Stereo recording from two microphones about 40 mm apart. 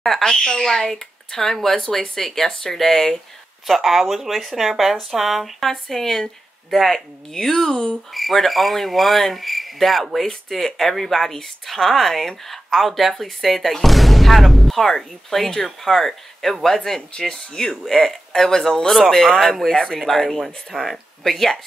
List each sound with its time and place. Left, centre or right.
0.0 s a sound: centre
0.5 s speech: centre
3.6 s speech: centre
5.7 s speech: centre